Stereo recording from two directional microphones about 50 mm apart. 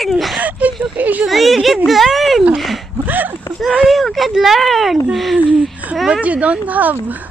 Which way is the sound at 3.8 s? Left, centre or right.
Centre.